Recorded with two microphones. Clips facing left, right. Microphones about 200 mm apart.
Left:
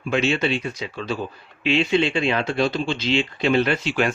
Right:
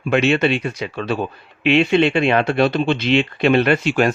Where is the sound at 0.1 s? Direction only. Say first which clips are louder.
Right 5 dB; 65° right (ahead or behind).